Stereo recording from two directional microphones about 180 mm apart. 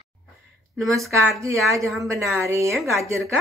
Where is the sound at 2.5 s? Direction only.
15° right (ahead or behind).